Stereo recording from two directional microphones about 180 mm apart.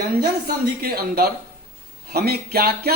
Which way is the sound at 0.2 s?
60° right (ahead or behind).